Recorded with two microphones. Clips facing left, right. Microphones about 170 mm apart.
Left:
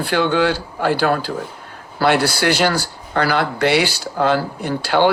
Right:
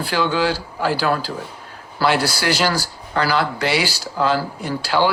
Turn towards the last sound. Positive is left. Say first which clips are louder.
# left 3 dB
turn(degrees=55)  # may be behind; listen again after turning